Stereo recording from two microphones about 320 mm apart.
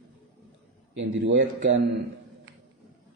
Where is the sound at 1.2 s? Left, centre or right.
Right.